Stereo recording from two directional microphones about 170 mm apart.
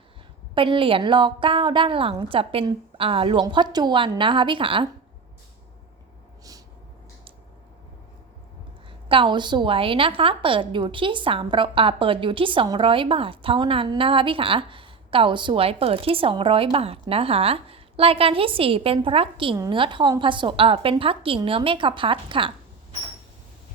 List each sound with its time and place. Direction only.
0.5 s a woman's voice: 30° right (ahead or behind)
9.0 s a woman's voice: 30° right (ahead or behind)